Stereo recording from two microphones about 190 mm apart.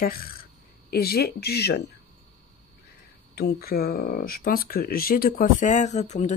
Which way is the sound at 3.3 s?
55° left (ahead or behind).